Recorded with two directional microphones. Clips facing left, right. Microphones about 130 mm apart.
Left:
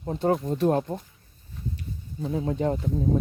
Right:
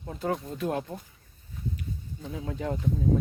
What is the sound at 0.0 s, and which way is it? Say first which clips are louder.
Speech: left 7 dB; 30° left (ahead or behind).